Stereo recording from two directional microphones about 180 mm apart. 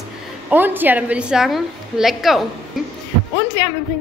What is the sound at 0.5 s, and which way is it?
A woman's voice, 10° right (ahead or behind).